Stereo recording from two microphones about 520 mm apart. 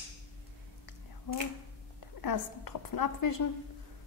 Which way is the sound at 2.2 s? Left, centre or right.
Left.